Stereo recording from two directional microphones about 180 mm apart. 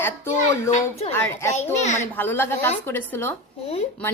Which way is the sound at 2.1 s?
10° left (ahead or behind).